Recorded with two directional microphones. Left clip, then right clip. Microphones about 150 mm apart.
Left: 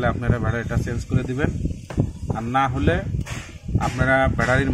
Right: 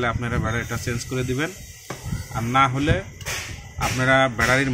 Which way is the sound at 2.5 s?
30° left (ahead or behind).